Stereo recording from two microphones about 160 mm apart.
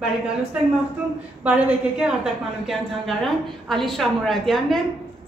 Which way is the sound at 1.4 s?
10° right (ahead or behind).